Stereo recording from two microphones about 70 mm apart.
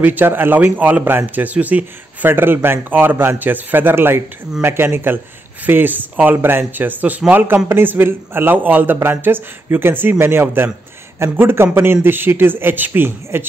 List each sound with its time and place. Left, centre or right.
0.0 s a man's voice: right